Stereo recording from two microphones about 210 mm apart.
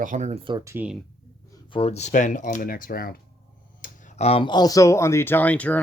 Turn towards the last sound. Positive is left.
turn(degrees=5)  # may be behind; listen again after turning